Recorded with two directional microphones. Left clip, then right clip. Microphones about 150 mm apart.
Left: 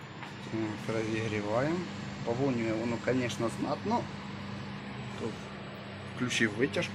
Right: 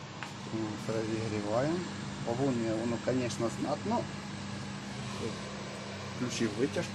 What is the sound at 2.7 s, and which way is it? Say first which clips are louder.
Speech: left 1 dB; 5° left (ahead or behind).